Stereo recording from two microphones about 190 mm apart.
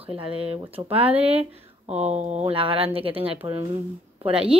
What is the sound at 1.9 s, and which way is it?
Speech, 35° right (ahead or behind).